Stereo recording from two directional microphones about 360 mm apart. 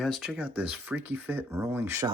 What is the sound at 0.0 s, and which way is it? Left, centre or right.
Speech, centre.